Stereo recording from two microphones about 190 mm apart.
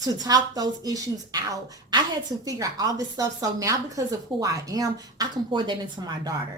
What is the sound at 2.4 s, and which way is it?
A woman's voice, 20° right (ahead or behind).